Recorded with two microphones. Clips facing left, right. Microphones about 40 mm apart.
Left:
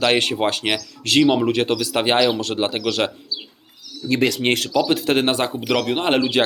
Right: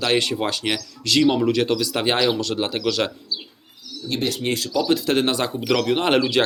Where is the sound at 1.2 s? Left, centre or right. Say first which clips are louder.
Even; left.